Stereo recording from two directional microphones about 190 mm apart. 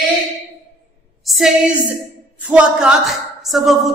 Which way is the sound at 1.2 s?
Centre (ahead or behind).